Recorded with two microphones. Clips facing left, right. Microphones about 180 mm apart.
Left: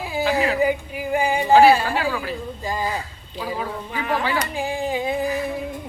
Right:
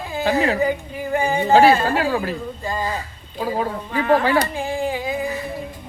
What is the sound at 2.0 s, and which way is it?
Speech, 40° right (ahead or behind).